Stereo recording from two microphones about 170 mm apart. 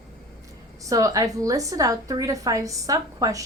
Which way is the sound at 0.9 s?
20° right (ahead or behind).